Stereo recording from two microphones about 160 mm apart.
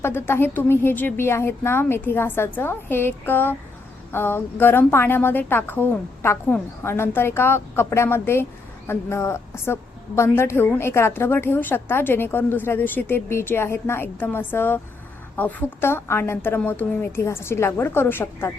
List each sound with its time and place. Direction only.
0.0 s a woman's voice: 15° left (ahead or behind)